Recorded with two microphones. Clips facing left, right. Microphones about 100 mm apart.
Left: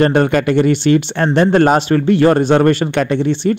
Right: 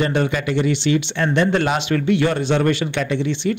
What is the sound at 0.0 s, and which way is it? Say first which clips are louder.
Speech: left 7 dB; 55° left (ahead or behind).